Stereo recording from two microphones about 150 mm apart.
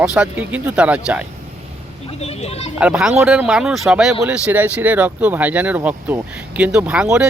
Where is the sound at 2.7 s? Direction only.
5° right (ahead or behind).